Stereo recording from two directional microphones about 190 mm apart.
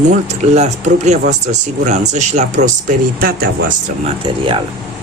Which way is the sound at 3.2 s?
50° right (ahead or behind).